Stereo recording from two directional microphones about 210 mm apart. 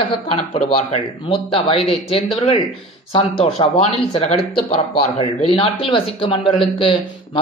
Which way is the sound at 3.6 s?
30° left (ahead or behind).